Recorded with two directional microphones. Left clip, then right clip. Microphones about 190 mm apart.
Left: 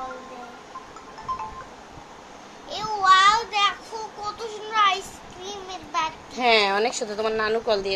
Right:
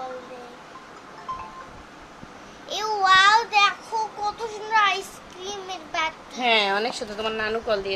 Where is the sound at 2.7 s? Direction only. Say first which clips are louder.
Even; 35° right (ahead or behind); by 3.7 s 20° right (ahead or behind).